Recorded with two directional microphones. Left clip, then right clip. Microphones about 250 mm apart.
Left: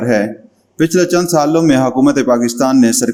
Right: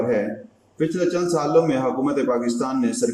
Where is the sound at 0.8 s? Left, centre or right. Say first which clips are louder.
Left 9 dB; left.